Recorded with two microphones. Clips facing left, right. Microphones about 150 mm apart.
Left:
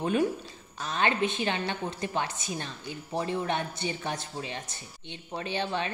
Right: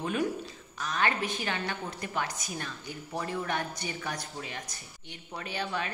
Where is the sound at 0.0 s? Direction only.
30° left (ahead or behind).